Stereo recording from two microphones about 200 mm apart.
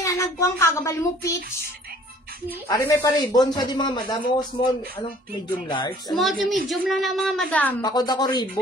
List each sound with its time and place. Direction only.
0.0 s speech: 15° left (ahead or behind)
2.7 s speech: 15° left (ahead or behind)
6.1 s a woman's voice: centre (ahead or behind)
7.8 s speech: 20° left (ahead or behind)